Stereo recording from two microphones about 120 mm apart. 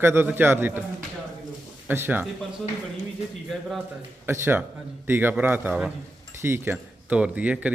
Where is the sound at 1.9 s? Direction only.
15° right (ahead or behind).